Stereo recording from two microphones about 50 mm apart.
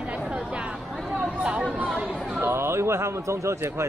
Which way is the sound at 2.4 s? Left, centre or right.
Right.